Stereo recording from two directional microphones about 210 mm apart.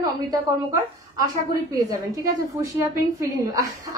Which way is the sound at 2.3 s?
15° right (ahead or behind).